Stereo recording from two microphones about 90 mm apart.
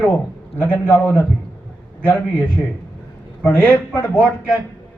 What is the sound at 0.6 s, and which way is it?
Speech, 20° left (ahead or behind).